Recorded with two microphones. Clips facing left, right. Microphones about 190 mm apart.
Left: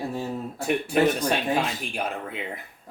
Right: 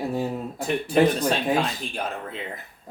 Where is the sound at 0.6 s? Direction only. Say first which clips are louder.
Right 2 dB; 10° left (ahead or behind).